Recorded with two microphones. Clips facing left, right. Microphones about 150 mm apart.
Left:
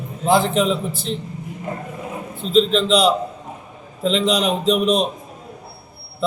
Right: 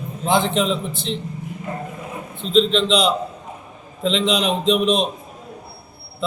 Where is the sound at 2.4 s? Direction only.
5° left (ahead or behind).